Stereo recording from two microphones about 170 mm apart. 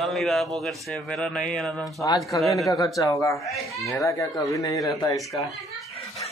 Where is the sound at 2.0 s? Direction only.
20° left (ahead or behind).